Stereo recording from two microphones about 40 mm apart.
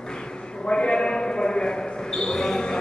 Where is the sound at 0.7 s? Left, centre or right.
Left.